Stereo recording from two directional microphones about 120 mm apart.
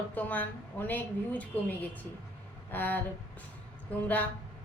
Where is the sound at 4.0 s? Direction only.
10° left (ahead or behind).